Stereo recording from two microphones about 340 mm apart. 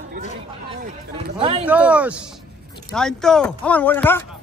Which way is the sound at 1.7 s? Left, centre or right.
Centre.